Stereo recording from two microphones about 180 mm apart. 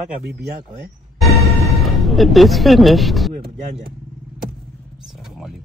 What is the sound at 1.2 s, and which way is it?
Music, centre (ahead or behind).